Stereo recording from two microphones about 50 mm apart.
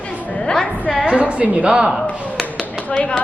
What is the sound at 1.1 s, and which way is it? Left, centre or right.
Speech, right.